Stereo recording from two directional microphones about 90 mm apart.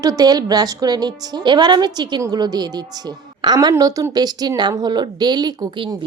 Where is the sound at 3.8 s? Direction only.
40° right (ahead or behind); by 5.9 s 55° right (ahead or behind).